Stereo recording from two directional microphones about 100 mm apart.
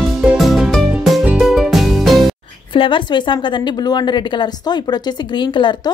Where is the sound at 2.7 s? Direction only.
60° left (ahead or behind).